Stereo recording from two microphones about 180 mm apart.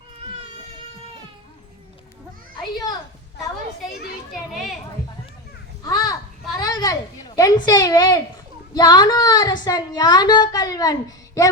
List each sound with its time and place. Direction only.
5.8 s children playing: 20° left (ahead or behind)
6.6 s a sound: 20° left (ahead or behind)
8.7 s a woman's voice: 20° left (ahead or behind)